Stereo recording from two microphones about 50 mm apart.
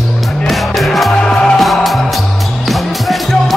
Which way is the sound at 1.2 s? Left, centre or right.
Centre.